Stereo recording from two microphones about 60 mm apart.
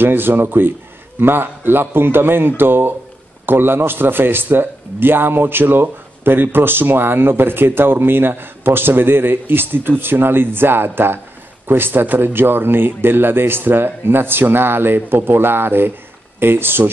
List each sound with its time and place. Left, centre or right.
0.0 s speech: right